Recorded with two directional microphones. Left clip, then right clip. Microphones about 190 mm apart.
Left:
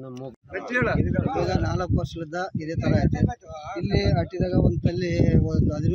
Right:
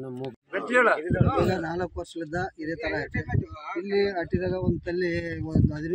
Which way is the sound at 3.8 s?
30° left (ahead or behind).